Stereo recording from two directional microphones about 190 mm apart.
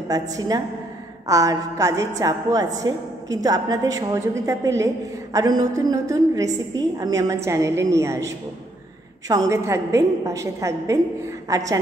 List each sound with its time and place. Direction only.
0.1 s a woman's voice: 20° right (ahead or behind)
9.3 s a woman's voice: 15° right (ahead or behind)